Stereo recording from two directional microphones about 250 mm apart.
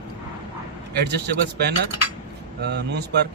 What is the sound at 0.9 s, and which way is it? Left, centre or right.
Speech, right.